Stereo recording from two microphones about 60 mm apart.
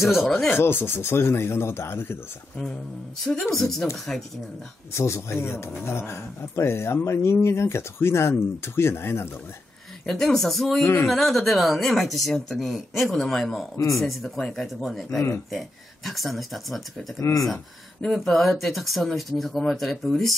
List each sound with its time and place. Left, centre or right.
0.0 s speech: centre
0.6 s speech: left
3.3 s speech: centre
4.9 s speech: left
10.0 s speech: centre
10.8 s speech: left
11.1 s speech: centre
13.7 s speech: left
14.0 s speech: centre
17.2 s speech: left
18.0 s speech: centre